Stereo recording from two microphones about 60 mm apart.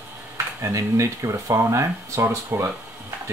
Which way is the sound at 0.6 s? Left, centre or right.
Right.